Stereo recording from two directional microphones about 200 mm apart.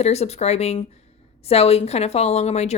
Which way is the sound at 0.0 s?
30° left (ahead or behind).